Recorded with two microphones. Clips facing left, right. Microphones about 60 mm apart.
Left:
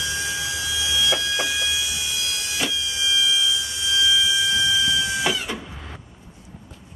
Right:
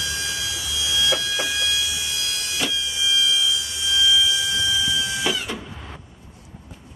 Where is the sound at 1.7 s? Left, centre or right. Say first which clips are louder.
Right 1 dB; left.